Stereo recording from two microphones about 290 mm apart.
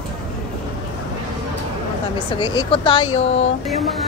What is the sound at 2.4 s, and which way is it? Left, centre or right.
Speech, centre.